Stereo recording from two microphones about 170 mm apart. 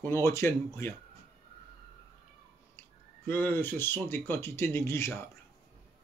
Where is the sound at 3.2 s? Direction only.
10° left (ahead or behind).